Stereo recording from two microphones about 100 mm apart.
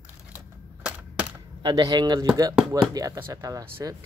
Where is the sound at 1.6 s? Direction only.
45° right (ahead or behind).